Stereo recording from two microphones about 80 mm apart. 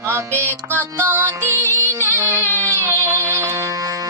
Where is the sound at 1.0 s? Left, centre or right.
Right.